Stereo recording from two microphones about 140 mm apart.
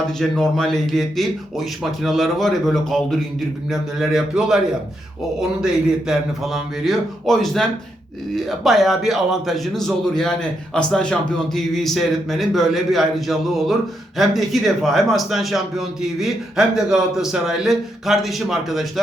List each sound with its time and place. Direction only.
0.2 s a man's voice: 5° left (ahead or behind)
6.1 s a man's voice: centre (ahead or behind)